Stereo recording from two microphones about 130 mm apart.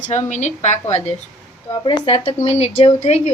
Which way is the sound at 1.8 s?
40° left (ahead or behind).